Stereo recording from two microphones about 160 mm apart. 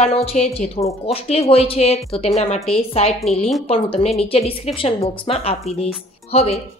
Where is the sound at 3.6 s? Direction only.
35° left (ahead or behind).